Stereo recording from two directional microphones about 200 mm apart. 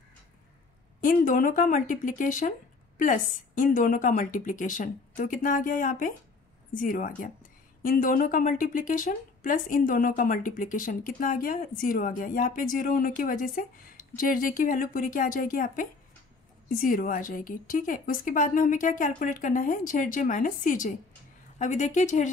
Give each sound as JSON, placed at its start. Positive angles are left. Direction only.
{"t": 1.0, "sound": "a woman's voice", "side_deg": 40}